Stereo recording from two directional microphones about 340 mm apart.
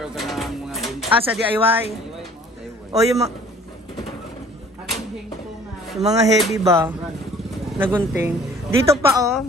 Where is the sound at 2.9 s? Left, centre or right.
Centre.